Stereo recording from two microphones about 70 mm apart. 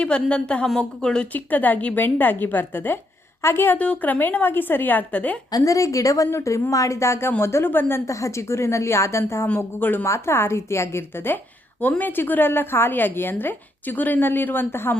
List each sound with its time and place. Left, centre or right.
0.0 s a woman's voice: centre
1.3 s a woman's voice: left
3.8 s a woman's voice: left
5.5 s a woman's voice: left
8.1 s a woman's voice: left